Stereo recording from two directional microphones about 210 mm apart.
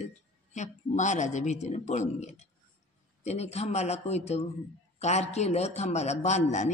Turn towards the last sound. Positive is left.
turn(degrees=35)  # may be behind; listen again after turning